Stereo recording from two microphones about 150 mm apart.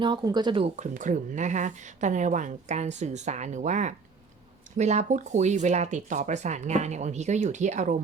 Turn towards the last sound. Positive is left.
turn(degrees=-55)  # may be behind; listen again after turning